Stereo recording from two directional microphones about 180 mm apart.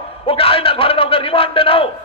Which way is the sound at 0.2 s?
30° left (ahead or behind).